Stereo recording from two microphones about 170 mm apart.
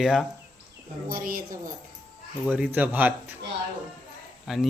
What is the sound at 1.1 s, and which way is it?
Speech, 55° right (ahead or behind).